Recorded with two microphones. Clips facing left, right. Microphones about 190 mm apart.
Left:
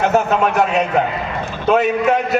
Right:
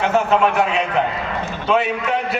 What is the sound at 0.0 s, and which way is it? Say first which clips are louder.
A man's voice: left 1 dB; 40° left (ahead or behind).